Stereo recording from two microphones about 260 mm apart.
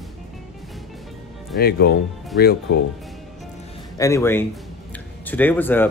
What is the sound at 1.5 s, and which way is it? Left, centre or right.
Speech, left.